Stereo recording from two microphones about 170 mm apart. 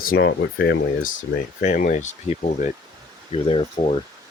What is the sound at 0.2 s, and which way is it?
Speech, 80° left.